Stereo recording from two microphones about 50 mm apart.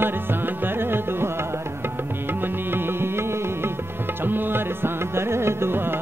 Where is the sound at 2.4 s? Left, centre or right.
Right.